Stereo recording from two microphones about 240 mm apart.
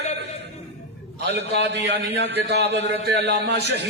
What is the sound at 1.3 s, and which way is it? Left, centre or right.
A man's voice, right.